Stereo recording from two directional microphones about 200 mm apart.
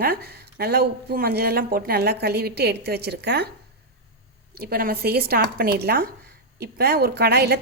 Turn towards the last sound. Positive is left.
turn(degrees=-50)  # may be behind; listen again after turning